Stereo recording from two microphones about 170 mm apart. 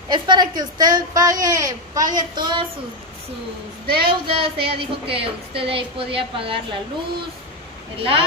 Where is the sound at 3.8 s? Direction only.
65° right (ahead or behind).